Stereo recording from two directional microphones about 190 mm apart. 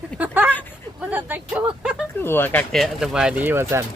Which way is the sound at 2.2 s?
10° left (ahead or behind).